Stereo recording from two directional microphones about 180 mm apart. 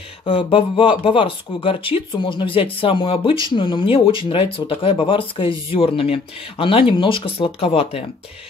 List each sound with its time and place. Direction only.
0.2 s speech: 30° left (ahead or behind)